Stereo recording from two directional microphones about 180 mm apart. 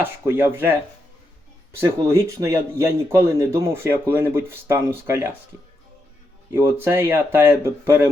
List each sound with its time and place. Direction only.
0.0 s speech: 10° right (ahead or behind)
6.5 s speech: 15° right (ahead or behind)